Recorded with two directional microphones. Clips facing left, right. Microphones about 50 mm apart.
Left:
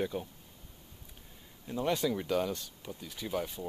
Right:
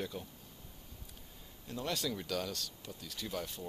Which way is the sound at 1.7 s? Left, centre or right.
Centre.